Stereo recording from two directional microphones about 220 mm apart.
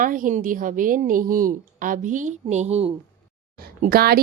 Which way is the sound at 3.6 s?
45° right (ahead or behind).